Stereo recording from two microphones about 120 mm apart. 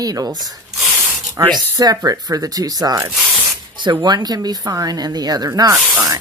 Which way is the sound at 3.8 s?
40° right (ahead or behind).